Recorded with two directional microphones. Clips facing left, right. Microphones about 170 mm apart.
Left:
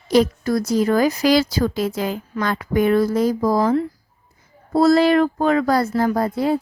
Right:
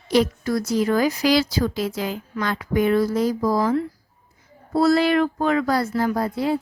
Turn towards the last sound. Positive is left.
turn(degrees=45)  # may be behind; listen again after turning